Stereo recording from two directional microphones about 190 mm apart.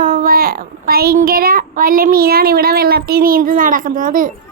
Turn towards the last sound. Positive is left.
turn(degrees=-45)  # may be behind; listen again after turning